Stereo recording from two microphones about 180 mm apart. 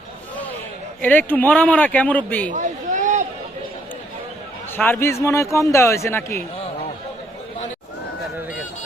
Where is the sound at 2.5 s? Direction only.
45° right (ahead or behind).